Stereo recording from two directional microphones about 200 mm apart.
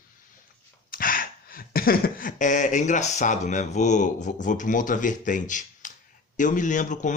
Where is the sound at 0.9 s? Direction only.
45° left (ahead or behind).